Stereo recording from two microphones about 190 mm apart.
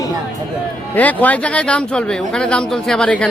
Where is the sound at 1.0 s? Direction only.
10° left (ahead or behind).